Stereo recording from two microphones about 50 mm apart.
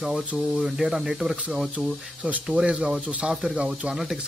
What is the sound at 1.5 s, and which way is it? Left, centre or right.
Speech, right.